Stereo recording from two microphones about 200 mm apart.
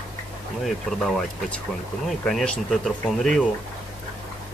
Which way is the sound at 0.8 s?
Centre (ahead or behind).